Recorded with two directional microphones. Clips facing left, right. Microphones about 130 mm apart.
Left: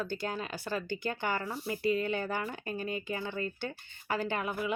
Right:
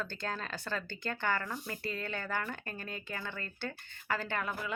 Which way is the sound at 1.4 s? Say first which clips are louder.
Left 4 dB; 30° left (ahead or behind).